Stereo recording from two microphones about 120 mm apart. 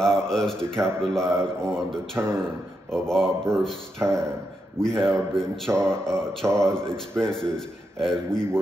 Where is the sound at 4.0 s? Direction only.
25° right (ahead or behind).